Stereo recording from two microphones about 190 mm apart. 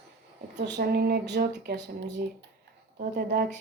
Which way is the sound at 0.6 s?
60° right (ahead or behind).